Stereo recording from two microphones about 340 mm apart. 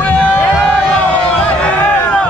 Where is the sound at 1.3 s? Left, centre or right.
Centre.